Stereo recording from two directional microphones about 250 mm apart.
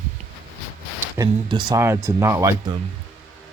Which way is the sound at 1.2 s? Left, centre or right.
Centre.